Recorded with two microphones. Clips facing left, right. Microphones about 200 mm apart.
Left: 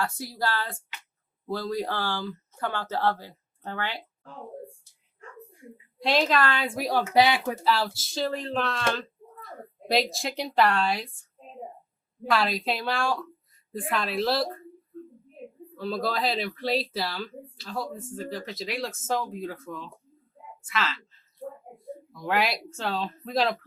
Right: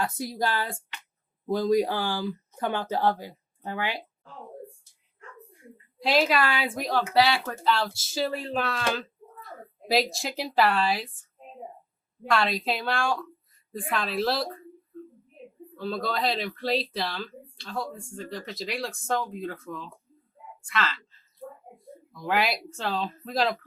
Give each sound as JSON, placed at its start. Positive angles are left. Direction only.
{"t": 0.0, "sound": "speech", "side_deg": -20}
{"t": 5.7, "sound": "a woman's voice", "side_deg": 0}
{"t": 6.7, "sound": "speech", "side_deg": 10}
{"t": 7.6, "sound": "speech", "side_deg": 5}
{"t": 12.3, "sound": "speech", "side_deg": 0}
{"t": 15.7, "sound": "speech", "side_deg": 0}
{"t": 21.8, "sound": "a sound", "side_deg": 0}
{"t": 22.7, "sound": "speech", "side_deg": 0}